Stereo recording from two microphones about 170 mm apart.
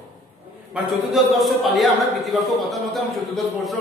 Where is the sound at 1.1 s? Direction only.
Centre (ahead or behind).